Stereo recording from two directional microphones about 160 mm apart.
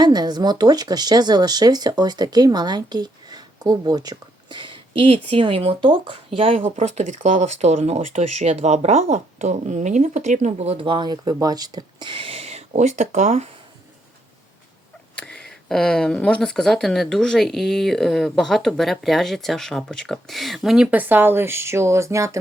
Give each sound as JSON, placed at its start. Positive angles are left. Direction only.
{"t": 0.0, "sound": "speech", "side_deg": -25}
{"t": 15.1, "sound": "speech", "side_deg": 5}